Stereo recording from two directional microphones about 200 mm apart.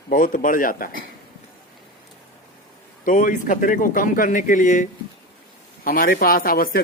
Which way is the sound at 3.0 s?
40° left (ahead or behind).